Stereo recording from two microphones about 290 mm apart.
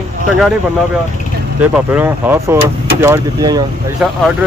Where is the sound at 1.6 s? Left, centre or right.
Centre.